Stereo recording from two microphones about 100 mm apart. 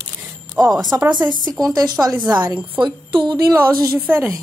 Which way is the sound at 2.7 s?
50° right (ahead or behind).